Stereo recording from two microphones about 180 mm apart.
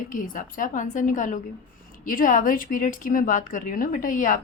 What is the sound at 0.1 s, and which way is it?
A woman's voice, 50° left (ahead or behind).